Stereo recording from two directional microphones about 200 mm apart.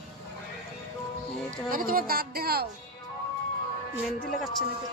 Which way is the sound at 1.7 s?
45° right (ahead or behind).